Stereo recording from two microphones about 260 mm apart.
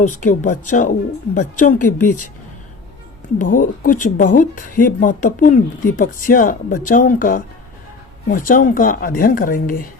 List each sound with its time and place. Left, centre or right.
0.0 s speech: left
3.6 s speech: left